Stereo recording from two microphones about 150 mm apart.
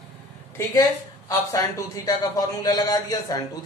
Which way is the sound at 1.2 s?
20° left (ahead or behind).